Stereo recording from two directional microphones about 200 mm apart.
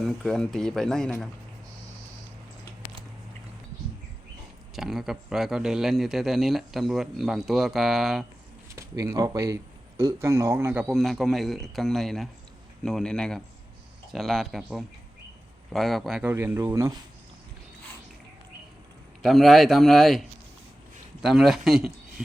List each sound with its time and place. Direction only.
0.0 s a man's voice: centre (ahead or behind)
4.7 s a man's voice: centre (ahead or behind)
8.7 s a man's voice: 15° right (ahead or behind)
19.2 s a man's voice: centre (ahead or behind)